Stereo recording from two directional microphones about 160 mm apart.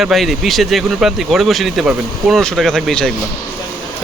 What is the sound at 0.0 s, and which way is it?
Speech, centre (ahead or behind).